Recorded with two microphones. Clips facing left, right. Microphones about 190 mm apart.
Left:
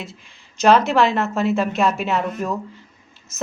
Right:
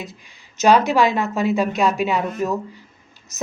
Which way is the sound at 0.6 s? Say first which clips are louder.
Even; centre (ahead or behind).